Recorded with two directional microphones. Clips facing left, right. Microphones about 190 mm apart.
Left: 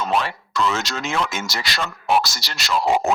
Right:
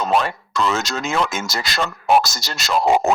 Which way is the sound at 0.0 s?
45° right (ahead or behind).